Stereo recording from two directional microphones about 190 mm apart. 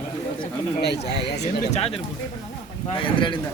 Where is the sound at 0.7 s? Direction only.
60° left (ahead or behind).